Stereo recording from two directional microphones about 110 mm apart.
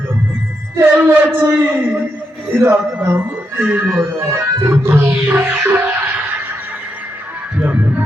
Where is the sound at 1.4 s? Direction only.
20° right (ahead or behind).